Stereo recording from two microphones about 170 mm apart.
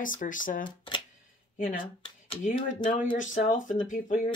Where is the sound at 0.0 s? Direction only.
50° left (ahead or behind).